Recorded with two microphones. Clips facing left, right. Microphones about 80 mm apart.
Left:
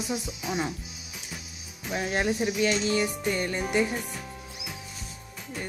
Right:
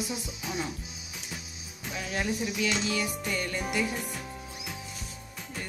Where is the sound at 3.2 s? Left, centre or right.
Left.